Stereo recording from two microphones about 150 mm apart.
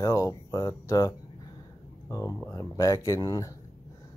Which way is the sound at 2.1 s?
20° left (ahead or behind).